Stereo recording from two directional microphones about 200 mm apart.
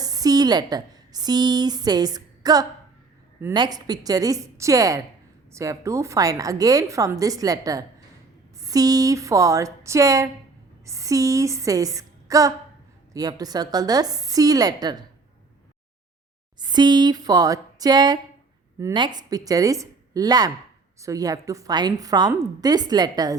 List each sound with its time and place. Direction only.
0.0 s a woman's voice: 20° right (ahead or behind)
16.6 s a woman's voice: 20° right (ahead or behind)